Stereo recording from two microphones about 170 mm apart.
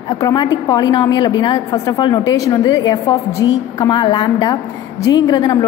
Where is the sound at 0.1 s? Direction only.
25° left (ahead or behind).